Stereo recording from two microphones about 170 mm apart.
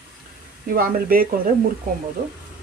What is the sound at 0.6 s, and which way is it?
Speech, 60° right (ahead or behind).